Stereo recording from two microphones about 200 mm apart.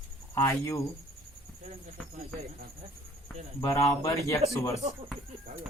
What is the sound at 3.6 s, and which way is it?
Speech, 15° left (ahead or behind).